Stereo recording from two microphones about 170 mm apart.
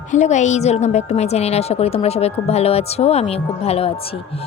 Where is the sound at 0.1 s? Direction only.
45° left (ahead or behind).